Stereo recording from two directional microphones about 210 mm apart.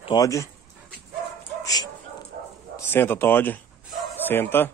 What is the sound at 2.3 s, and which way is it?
Bow-wow, 45° right (ahead or behind).